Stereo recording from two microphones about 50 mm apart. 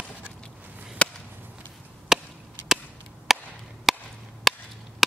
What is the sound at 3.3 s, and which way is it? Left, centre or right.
Chop, centre.